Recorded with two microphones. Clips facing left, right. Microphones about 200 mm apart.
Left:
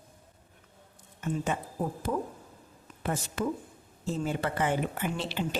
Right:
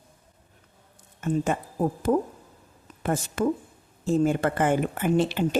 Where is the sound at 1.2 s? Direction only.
50° right (ahead or behind).